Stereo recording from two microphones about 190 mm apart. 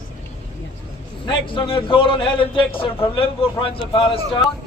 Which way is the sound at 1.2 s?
25° left (ahead or behind).